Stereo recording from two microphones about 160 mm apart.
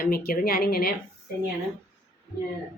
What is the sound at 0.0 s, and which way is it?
Speech, 65° left (ahead or behind).